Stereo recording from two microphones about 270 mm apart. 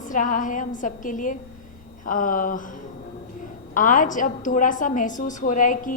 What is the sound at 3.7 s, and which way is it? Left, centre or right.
A woman's voice, left.